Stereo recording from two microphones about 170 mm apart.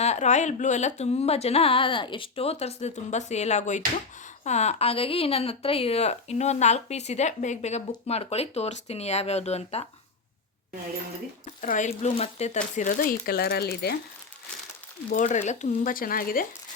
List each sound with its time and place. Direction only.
0.0 s speech: 40° left (ahead or behind)
11.6 s speech: 50° left (ahead or behind); by 13.9 s 70° left (ahead or behind)
15.1 s speech: 45° left (ahead or behind)